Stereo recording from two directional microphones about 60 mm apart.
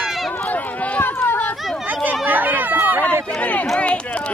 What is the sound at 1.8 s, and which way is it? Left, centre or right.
Chatter, right.